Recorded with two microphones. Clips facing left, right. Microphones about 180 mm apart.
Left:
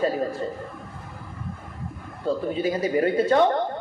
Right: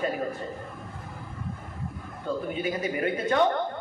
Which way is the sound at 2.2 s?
35° left (ahead or behind).